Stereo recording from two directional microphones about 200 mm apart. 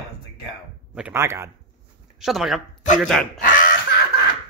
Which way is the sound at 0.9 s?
10° right (ahead or behind).